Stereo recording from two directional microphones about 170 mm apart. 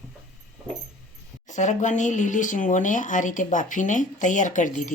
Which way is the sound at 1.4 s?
45° left (ahead or behind).